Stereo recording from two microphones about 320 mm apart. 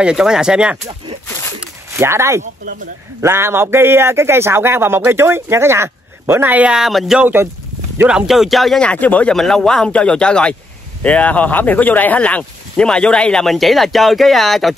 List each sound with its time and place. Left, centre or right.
0.0 s speech: centre
1.6 s a sound: centre
2.6 s speech: right
3.2 s a man's voice: centre